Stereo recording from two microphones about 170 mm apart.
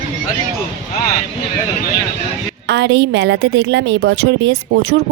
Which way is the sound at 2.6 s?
90° right.